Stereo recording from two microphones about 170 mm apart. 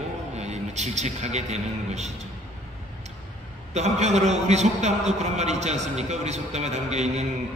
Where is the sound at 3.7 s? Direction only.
40° right (ahead or behind).